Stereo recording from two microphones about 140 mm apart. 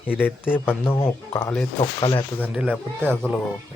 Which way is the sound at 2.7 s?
5° left (ahead or behind).